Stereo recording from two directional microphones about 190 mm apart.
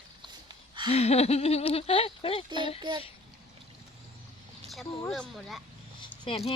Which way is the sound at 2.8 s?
25° right (ahead or behind).